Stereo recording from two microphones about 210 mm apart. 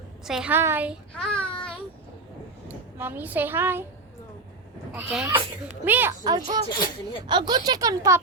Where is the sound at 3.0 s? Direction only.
10° right (ahead or behind).